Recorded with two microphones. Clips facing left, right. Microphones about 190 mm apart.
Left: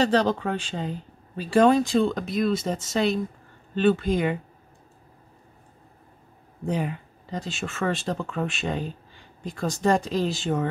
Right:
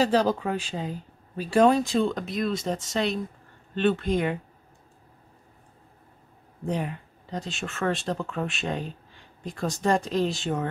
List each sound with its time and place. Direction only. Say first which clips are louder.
0.0 s speech: left 1 dB; 5° right (ahead or behind)
6.6 s speech: left 2 dB; centre (ahead or behind)